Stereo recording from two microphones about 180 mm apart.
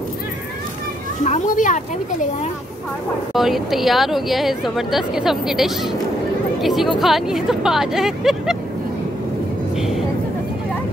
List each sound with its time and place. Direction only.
1.2 s a child's voice: 40° left (ahead or behind)
3.3 s speech: centre (ahead or behind)
9.8 s speech: centre (ahead or behind)